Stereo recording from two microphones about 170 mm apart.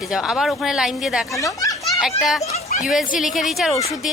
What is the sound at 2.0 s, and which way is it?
Speech, centre (ahead or behind).